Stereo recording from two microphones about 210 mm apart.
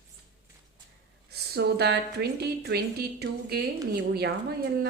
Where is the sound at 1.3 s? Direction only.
50° right (ahead or behind).